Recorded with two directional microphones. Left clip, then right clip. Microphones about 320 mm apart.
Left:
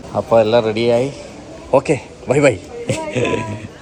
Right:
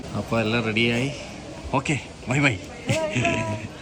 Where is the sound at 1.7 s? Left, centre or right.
Centre.